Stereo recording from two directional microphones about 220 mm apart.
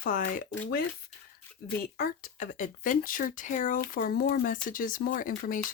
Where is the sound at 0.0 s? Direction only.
40° left (ahead or behind).